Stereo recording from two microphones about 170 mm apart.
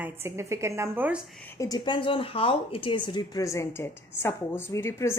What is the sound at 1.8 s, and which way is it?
Speech, 30° left (ahead or behind).